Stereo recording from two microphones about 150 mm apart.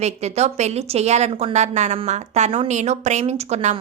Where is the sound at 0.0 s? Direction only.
45° right (ahead or behind).